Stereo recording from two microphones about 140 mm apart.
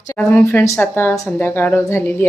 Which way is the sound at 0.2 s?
10° left (ahead or behind).